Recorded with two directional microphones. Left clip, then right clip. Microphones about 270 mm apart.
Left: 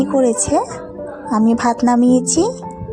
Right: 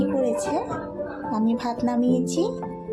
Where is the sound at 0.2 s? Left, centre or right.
Left.